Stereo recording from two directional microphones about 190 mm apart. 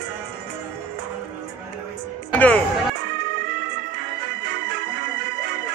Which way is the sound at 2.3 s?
10° left (ahead or behind).